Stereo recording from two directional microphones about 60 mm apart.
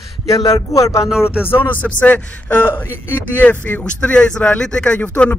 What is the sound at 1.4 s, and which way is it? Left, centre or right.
Speech, left.